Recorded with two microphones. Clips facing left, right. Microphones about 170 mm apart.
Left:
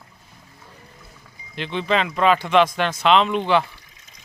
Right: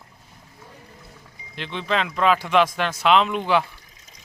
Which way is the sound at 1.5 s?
Centre (ahead or behind).